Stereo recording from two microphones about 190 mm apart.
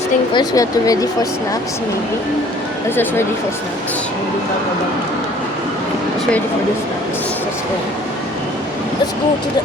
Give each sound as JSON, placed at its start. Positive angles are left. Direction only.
{"t": 0.3, "sound": "speech", "side_deg": 20}
{"t": 2.9, "sound": "speech", "side_deg": 10}